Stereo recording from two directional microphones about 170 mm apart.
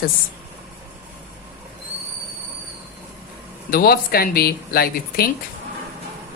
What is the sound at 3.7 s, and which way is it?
Speech, 60° left (ahead or behind).